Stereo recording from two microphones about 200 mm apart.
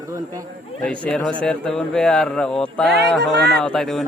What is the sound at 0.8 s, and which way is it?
A man's voice, 5° left (ahead or behind).